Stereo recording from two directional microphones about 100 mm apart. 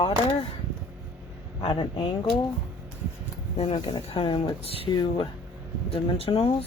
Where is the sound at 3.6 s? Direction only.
70° left (ahead or behind).